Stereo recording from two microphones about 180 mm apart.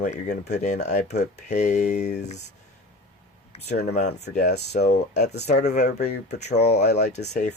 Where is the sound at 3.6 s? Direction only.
40° left (ahead or behind).